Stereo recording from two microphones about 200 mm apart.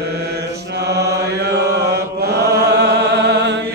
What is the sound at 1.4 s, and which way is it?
Chant, 55° right (ahead or behind).